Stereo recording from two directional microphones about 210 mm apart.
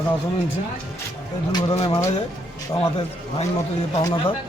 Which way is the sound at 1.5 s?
20° left (ahead or behind).